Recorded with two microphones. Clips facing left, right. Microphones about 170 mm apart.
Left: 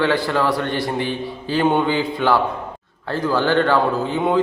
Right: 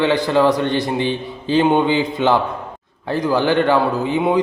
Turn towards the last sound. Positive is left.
turn(degrees=-15)  # may be behind; listen again after turning